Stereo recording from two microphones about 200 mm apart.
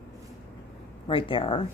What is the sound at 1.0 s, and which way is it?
Speech, 25° left (ahead or behind).